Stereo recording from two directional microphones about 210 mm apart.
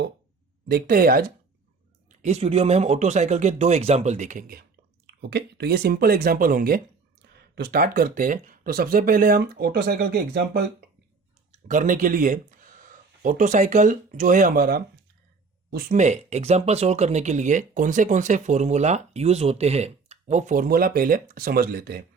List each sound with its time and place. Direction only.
0.7 s speech: 45° right (ahead or behind)
2.0 s speech: 30° right (ahead or behind)
5.2 s speech: 50° right (ahead or behind)